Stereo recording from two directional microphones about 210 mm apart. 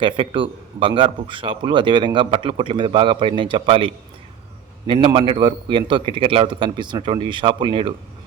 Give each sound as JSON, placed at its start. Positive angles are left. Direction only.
{"t": 0.0, "sound": "a man's voice", "side_deg": -25}